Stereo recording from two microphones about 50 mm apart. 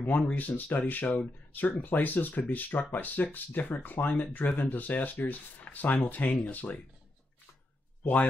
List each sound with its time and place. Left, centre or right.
0.0 s speech: left